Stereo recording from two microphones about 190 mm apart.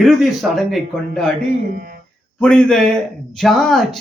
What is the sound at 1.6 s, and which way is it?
Speech, 50° right (ahead or behind).